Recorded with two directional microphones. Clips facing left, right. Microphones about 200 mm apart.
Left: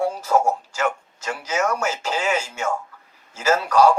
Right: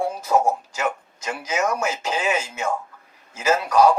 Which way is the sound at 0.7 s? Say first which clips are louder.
Left 2 dB; 20° right (ahead or behind).